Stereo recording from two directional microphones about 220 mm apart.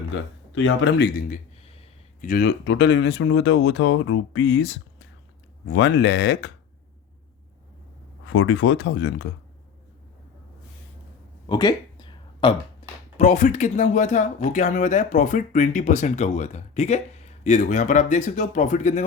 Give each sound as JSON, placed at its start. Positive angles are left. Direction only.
{"t": 0.1, "sound": "speech", "side_deg": 60}
{"t": 8.3, "sound": "speech", "side_deg": 65}
{"t": 11.4, "sound": "a sound", "side_deg": 20}
{"t": 13.1, "sound": "speech", "side_deg": 35}